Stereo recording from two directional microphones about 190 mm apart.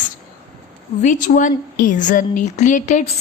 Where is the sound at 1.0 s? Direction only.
45° left (ahead or behind).